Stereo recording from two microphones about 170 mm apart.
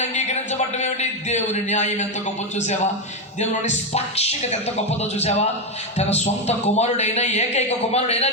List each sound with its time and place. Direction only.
0.0 s a man's voice: 40° left (ahead or behind)
3.5 s a man's voice: 45° left (ahead or behind)